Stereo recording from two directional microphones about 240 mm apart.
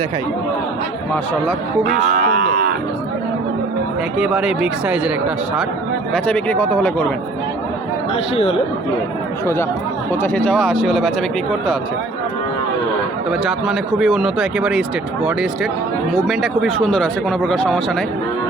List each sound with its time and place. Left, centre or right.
2.1 s moo: right
4.2 s speech: centre
6.1 s speech: centre
10.1 s speech: centre
13.4 s speech: centre